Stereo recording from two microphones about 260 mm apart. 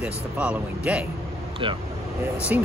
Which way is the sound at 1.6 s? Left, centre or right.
Centre.